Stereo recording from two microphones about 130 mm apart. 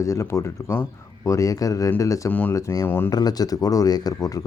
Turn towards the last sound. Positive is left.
turn(degrees=30)  # may be behind; listen again after turning